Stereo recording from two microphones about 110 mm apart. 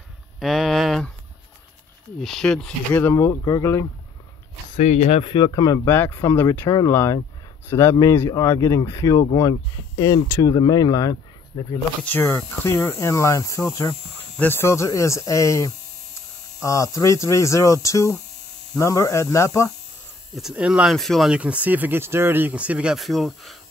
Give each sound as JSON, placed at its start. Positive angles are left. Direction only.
{"t": 0.4, "sound": "speech", "side_deg": 0}
{"t": 2.2, "sound": "speech", "side_deg": 5}
{"t": 2.9, "sound": "speech", "side_deg": 20}
{"t": 4.7, "sound": "speech", "side_deg": 90}
{"t": 5.2, "sound": "speech", "side_deg": 50}
{"t": 5.5, "sound": "speech", "side_deg": 35}
{"t": 5.9, "sound": "speech", "side_deg": 20}
{"t": 12.0, "sound": "speech", "side_deg": 20}
{"t": 14.3, "sound": "speech", "side_deg": 15}
{"t": 20.3, "sound": "speech", "side_deg": -5}
{"t": 20.9, "sound": "speech", "side_deg": 0}
{"t": 21.4, "sound": "speech", "side_deg": -15}